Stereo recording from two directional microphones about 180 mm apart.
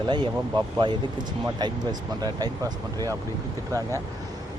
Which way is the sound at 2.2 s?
20° right (ahead or behind).